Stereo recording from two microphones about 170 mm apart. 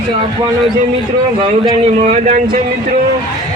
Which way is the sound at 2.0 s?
45° right (ahead or behind).